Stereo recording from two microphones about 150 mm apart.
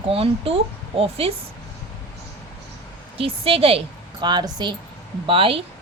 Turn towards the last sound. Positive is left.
turn(degrees=-35)  # may be behind; listen again after turning